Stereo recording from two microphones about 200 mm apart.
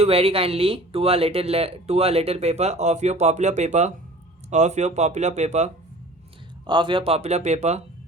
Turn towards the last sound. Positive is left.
turn(degrees=-35)  # may be behind; listen again after turning